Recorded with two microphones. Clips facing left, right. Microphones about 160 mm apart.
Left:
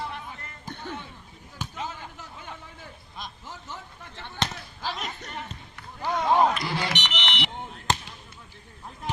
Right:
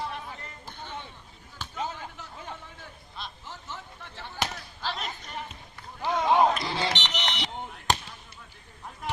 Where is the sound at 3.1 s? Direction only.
15° left (ahead or behind).